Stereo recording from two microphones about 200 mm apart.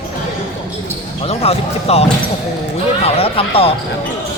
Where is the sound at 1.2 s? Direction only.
30° left (ahead or behind).